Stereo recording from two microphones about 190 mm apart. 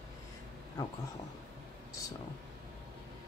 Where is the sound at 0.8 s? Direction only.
20° left (ahead or behind).